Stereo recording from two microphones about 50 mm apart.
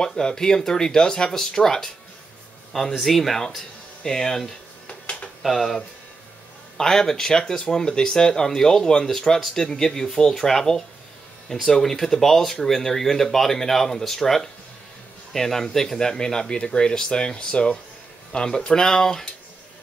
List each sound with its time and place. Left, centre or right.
0.0 s speech: centre
4.8 s a sound: left
5.4 s speech: centre